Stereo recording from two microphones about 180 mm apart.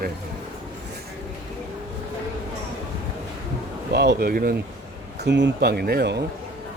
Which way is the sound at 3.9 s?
70° right (ahead or behind).